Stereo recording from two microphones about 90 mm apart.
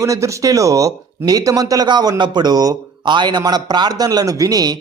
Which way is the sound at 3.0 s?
60° right (ahead or behind).